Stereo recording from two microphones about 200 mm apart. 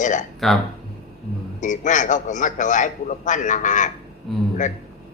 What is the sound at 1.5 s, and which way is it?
A man's voice, 40° left (ahead or behind).